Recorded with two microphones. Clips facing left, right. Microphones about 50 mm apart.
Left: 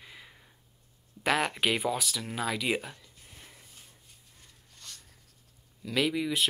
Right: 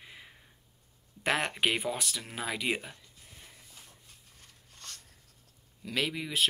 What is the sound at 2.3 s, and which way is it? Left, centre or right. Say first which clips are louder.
Speech: left 3 dB; centre.